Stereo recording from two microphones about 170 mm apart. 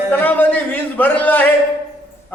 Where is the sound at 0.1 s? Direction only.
10° left (ahead or behind).